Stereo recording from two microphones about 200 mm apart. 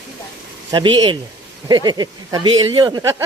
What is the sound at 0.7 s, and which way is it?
Speech, 20° right (ahead or behind).